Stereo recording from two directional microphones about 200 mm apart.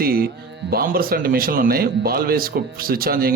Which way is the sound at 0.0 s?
50° right (ahead or behind).